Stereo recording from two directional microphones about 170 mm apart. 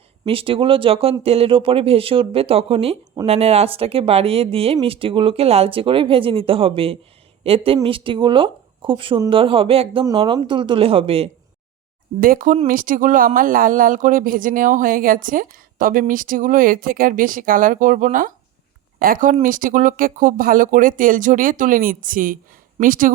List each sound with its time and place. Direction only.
0.3 s speech: 30° right (ahead or behind)
12.2 s speech: 55° right (ahead or behind)